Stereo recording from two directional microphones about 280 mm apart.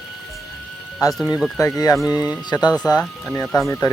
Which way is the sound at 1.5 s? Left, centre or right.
Centre.